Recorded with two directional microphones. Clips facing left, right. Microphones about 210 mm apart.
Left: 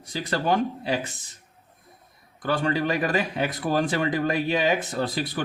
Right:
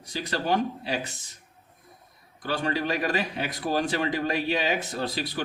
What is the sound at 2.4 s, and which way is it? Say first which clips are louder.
Speech: left 3 dB; 55° left (ahead or behind).